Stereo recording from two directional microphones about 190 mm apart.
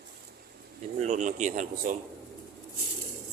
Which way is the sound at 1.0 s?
40° right (ahead or behind).